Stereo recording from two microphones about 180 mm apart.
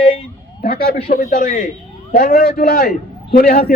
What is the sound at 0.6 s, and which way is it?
A man's voice, 55° left (ahead or behind).